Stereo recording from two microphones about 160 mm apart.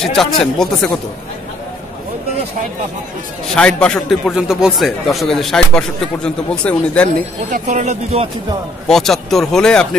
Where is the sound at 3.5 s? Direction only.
5° left (ahead or behind).